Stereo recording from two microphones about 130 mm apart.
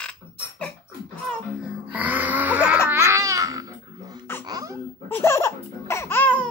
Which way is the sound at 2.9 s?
20° right (ahead or behind).